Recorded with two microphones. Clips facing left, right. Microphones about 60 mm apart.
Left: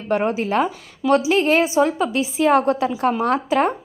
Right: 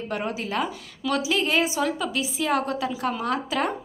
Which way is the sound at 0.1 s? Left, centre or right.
Left.